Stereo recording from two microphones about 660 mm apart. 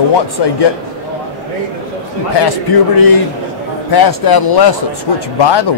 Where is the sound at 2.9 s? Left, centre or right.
Left.